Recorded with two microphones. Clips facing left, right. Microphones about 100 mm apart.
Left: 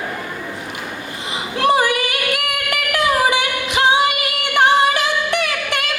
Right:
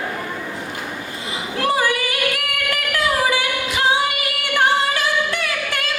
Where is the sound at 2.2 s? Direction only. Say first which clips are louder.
Left 1 dB; 20° left (ahead or behind).